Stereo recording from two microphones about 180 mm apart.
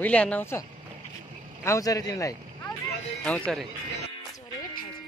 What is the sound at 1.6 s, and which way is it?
Speech, 20° left (ahead or behind).